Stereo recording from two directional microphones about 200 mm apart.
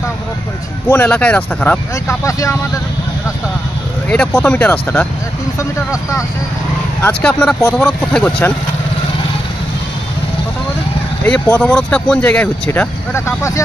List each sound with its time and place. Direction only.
0.8 s speech: 10° left (ahead or behind)
4.1 s speech: 5° left (ahead or behind)
11.5 s speech: 5° left (ahead or behind)